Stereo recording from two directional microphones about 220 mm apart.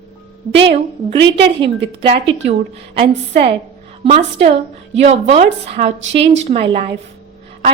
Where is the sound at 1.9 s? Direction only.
25° right (ahead or behind).